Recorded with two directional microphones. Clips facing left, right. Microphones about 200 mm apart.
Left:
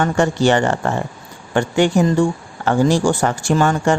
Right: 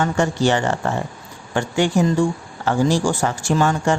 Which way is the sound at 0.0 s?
60° left (ahead or behind).